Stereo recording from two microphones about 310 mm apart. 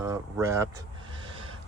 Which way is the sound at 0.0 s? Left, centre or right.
Centre.